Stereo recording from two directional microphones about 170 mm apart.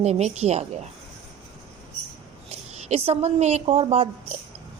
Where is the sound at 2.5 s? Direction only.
40° right (ahead or behind).